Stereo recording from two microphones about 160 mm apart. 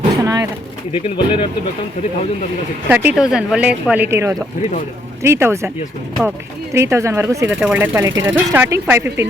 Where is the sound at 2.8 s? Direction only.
10° right (ahead or behind).